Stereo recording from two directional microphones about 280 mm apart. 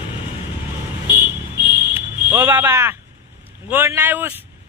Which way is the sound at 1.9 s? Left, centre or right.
Centre.